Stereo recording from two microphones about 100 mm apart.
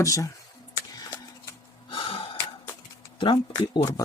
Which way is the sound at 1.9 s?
60° left (ahead or behind).